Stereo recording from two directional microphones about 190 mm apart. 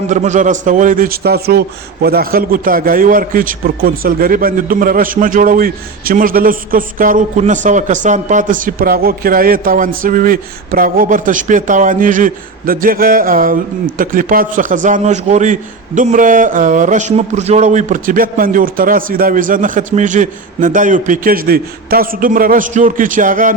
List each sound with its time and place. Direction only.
0.1 s a man's voice: 40° right (ahead or behind)